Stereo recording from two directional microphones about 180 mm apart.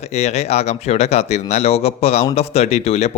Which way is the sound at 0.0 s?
40° left (ahead or behind).